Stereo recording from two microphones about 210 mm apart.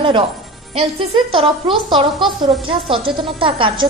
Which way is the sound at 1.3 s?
25° right (ahead or behind).